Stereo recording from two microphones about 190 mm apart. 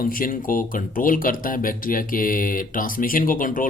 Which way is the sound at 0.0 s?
50° left (ahead or behind).